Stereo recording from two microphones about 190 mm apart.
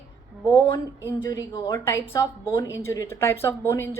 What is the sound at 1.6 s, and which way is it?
A woman's voice, 15° left (ahead or behind).